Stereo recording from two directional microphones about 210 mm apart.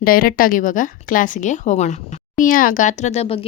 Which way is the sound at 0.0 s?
45° left (ahead or behind).